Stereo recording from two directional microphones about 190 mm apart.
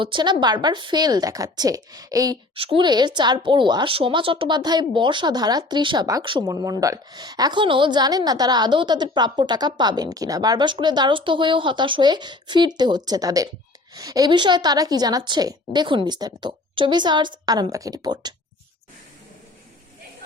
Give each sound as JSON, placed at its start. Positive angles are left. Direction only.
{"t": 0.0, "sound": "a woman's voice", "side_deg": -25}